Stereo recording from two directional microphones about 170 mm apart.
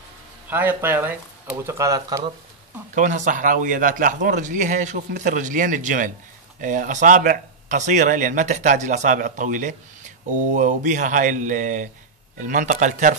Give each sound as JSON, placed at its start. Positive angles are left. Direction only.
{"t": 0.5, "sound": "speech", "side_deg": -10}
{"t": 2.9, "sound": "speech", "side_deg": -45}